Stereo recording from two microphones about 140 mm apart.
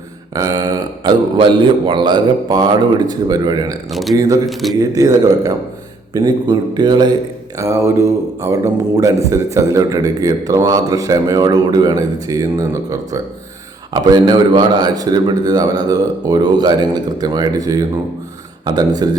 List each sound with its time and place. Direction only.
0.3 s a man's voice: 25° right (ahead or behind)
3.8 s speech: centre (ahead or behind)
4.1 s a man's voice: 25° right (ahead or behind)
4.4 s speech: centre (ahead or behind)
4.8 s a man's voice: 25° right (ahead or behind)
7.5 s a man's voice: 20° right (ahead or behind)